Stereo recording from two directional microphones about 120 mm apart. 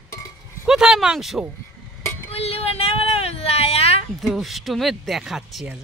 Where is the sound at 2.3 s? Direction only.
55° left (ahead or behind).